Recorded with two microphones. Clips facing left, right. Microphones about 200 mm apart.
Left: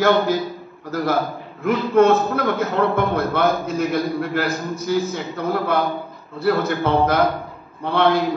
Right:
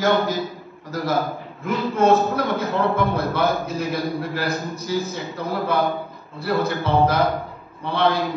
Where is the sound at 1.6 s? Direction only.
55° left (ahead or behind).